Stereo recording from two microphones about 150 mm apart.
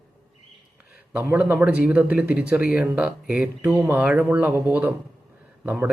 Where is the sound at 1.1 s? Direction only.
10° right (ahead or behind).